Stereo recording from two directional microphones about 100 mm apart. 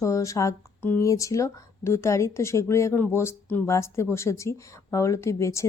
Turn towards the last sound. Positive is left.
turn(degrees=30)  # may be behind; listen again after turning